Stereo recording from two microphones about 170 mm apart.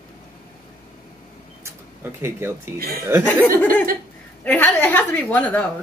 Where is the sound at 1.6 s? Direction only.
15° right (ahead or behind).